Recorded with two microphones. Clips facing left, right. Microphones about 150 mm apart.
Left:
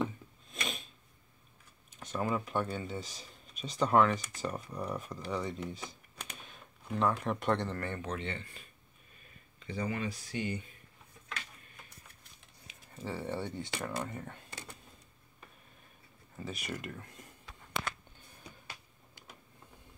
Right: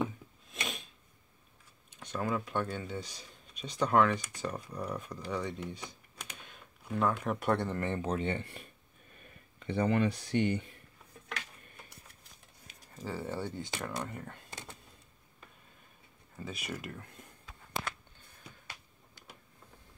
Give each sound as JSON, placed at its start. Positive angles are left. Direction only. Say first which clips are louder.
{"t": 0.5, "sound": "a sound", "louder": "even", "side_deg": 0}
{"t": 2.0, "sound": "speech", "louder": "even", "side_deg": 5}
{"t": 8.3, "sound": "speech", "louder": "right 6 dB", "side_deg": -60}
{"t": 12.9, "sound": "speech", "louder": "even", "side_deg": -5}
{"t": 14.5, "sound": "a sound", "louder": "right 1 dB", "side_deg": -20}
{"t": 16.3, "sound": "speech", "louder": "even", "side_deg": 0}